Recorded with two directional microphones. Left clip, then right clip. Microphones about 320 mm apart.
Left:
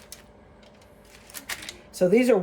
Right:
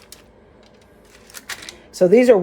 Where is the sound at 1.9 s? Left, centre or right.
Right.